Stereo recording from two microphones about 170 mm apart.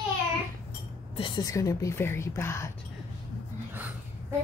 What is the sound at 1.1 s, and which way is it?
A woman's voice, 25° left (ahead or behind).